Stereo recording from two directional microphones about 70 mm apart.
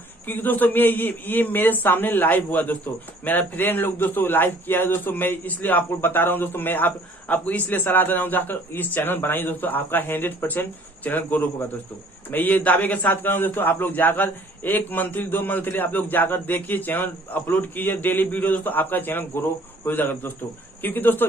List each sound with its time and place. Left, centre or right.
0.3 s a man's voice: left